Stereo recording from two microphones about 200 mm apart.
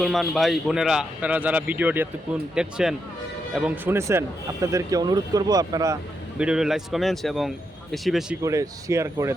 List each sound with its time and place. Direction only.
0.0 s a man's voice: centre (ahead or behind); by 6.0 s 15° right (ahead or behind)
6.4 s a man's voice: 5° right (ahead or behind)
8.4 s speech: 15° right (ahead or behind)